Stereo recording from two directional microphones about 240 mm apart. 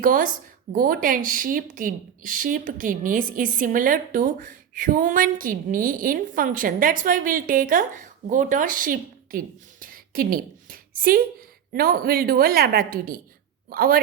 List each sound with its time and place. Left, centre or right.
0.0 s a woman's voice: right
9.8 s a sound: right
11.7 s a woman's voice: right